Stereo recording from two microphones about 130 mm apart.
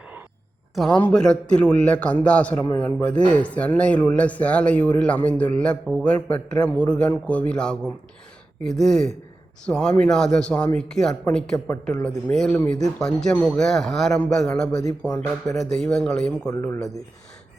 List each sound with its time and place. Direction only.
0.8 s speech: 5° left (ahead or behind)
16.5 s speech: 15° left (ahead or behind)